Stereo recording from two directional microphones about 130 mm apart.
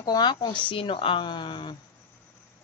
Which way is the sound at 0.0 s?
30° left (ahead or behind).